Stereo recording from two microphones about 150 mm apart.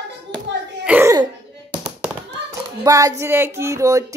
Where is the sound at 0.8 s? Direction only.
10° right (ahead or behind).